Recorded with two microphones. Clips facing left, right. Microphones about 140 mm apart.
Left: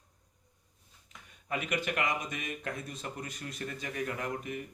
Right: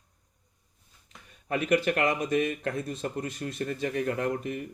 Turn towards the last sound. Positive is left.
turn(degrees=-35)  # may be behind; listen again after turning